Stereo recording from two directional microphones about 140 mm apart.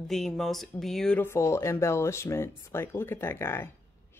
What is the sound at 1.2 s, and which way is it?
Speech, 20° left (ahead or behind).